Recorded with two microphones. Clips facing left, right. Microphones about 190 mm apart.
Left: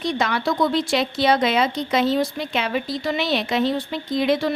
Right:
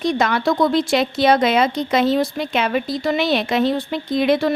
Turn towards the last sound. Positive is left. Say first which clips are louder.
# right 3 dB
turn(degrees=-55)  # may be behind; listen again after turning